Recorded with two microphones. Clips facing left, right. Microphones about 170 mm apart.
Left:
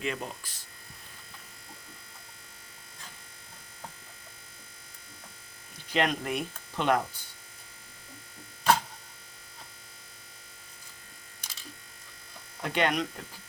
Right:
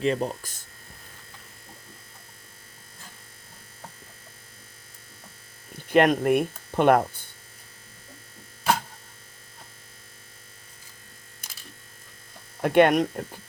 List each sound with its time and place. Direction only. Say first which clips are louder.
0.0 s speech: right 9 dB; 35° right (ahead or behind)
5.7 s speech: right 9 dB; 55° right (ahead or behind)
8.7 s electric shaver: even; 10° right (ahead or behind)
12.6 s speech: right 10 dB; 55° right (ahead or behind)